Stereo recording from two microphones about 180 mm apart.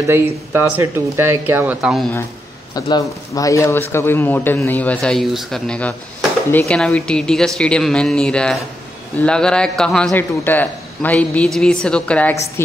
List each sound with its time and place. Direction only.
0.0 s speech: 15° right (ahead or behind)
2.7 s a man's voice: 20° left (ahead or behind)